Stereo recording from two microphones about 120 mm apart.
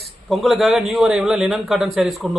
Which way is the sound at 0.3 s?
Centre (ahead or behind).